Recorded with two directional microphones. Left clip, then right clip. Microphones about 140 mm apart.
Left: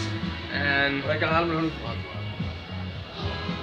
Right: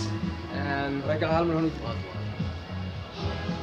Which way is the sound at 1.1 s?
50° right (ahead or behind).